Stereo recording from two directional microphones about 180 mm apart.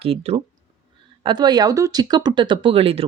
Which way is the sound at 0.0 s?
35° right (ahead or behind).